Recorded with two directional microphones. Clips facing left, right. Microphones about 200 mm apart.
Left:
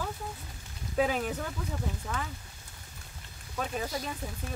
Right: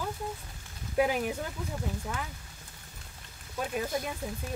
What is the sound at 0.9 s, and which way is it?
Speech, 10° right (ahead or behind).